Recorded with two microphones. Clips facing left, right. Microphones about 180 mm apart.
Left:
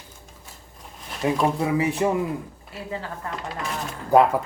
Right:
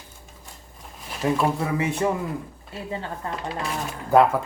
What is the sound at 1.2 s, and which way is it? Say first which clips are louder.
Speech: left 1 dB; 15° left (ahead or behind).